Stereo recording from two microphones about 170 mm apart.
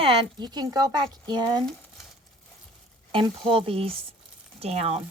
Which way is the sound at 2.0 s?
Centre (ahead or behind).